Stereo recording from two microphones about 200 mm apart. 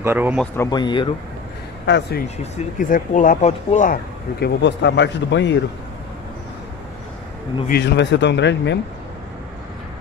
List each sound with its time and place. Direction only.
0.0 s speech: 10° right (ahead or behind)
0.6 s speech: 20° left (ahead or behind)
1.9 s speech: 55° left (ahead or behind)
2.2 s speech: 35° left (ahead or behind); by 5.6 s 60° left (ahead or behind)
7.6 s speech: 55° left (ahead or behind)